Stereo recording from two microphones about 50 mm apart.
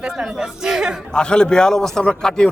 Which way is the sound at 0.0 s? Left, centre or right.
Centre.